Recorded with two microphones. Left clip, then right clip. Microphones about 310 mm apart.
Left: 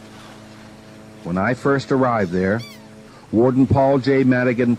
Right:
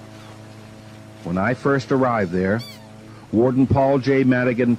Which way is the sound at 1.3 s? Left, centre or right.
Left.